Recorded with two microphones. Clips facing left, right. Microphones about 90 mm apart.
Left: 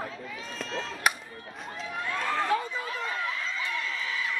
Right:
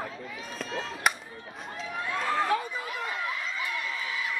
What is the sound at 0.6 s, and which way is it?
Chop, 10° right (ahead or behind).